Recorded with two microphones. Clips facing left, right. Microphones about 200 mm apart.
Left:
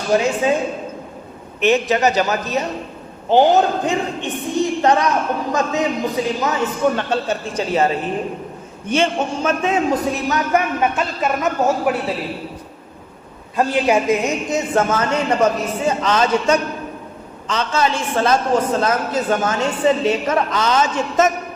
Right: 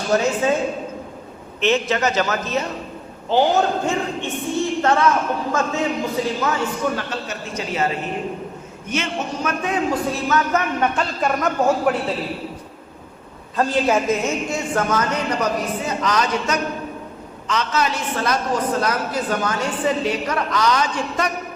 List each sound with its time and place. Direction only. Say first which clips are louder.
0.1 s a man's voice: left 2 dB; 15° left (ahead or behind)
1.6 s a man's voice: left 3 dB; 15° left (ahead or behind)
8.9 s a man's voice: left 6 dB; 30° left (ahead or behind); by 11.9 s 5° left (ahead or behind)
13.6 s a woman's voice: left 2 dB; 15° left (ahead or behind)